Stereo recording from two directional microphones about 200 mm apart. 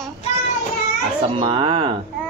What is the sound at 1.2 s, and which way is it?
Speech, 25° right (ahead or behind).